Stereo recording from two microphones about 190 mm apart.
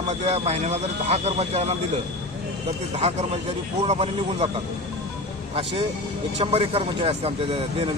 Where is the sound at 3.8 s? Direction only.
35° right (ahead or behind).